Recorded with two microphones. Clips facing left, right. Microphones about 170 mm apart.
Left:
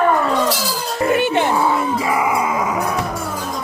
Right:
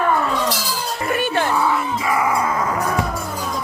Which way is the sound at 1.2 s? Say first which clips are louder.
Left 3 dB; 20° left (ahead or behind).